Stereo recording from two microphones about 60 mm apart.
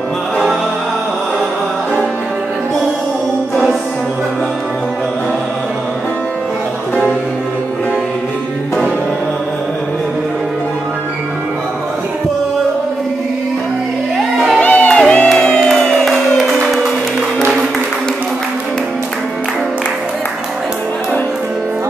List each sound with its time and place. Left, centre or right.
14.1 s music: centre
14.6 s music: left; by 16.8 s centre